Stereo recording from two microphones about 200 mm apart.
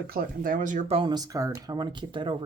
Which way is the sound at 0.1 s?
45° right (ahead or behind).